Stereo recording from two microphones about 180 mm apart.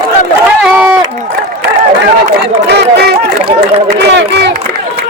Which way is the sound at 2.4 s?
70° right (ahead or behind).